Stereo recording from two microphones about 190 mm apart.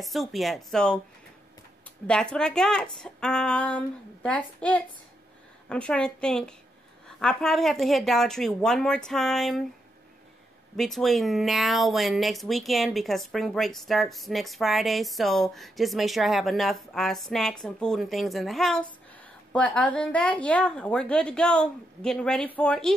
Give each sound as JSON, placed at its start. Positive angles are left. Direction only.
{"t": 0.0, "sound": "speech", "side_deg": 0}
{"t": 2.0, "sound": "speech", "side_deg": 5}
{"t": 10.8, "sound": "speech", "side_deg": 0}